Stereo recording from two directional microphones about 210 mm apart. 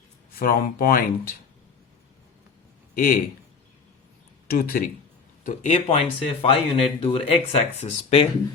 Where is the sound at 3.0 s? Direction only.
45° left (ahead or behind).